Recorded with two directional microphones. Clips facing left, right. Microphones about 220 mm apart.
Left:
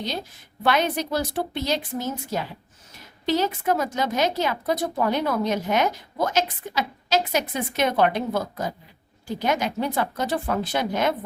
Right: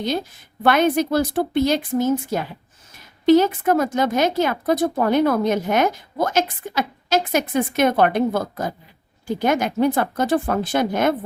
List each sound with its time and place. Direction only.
0.6 s a woman's voice: 50° right (ahead or behind)